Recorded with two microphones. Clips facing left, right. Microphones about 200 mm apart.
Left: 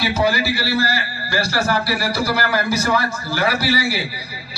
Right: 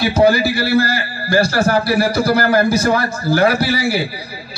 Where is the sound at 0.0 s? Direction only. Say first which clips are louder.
Right 6 dB; 50° right (ahead or behind).